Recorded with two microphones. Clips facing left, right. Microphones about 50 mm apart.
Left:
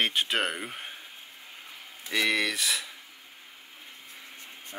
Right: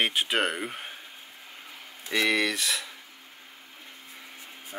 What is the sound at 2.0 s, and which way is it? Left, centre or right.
Speech, centre.